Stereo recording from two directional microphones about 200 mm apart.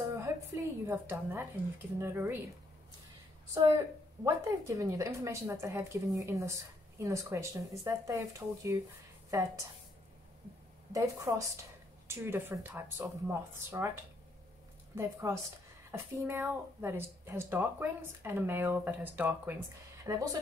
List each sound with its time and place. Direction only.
0.1 s a woman's voice: 15° right (ahead or behind)
3.5 s a woman's voice: 15° right (ahead or behind)
10.9 s a woman's voice: 15° right (ahead or behind)
15.0 s a woman's voice: 15° right (ahead or behind)